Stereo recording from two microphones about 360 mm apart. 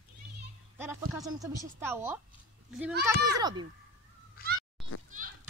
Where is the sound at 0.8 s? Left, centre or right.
Centre.